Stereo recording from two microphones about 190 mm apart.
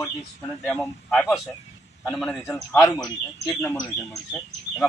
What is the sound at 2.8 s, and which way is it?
Speech, 15° left (ahead or behind).